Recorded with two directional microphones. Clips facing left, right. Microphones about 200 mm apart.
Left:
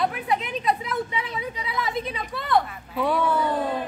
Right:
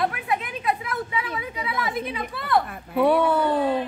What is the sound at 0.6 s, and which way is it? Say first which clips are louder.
Speech: left 1 dB; centre (ahead or behind).